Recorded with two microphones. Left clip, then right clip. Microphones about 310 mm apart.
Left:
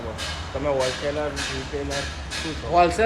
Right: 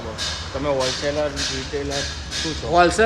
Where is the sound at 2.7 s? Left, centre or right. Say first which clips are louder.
Right 2 dB; right.